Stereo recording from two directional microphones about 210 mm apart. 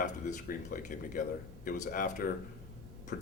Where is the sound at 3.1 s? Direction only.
40° left (ahead or behind).